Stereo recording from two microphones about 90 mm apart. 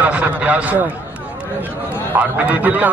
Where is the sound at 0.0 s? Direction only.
15° right (ahead or behind).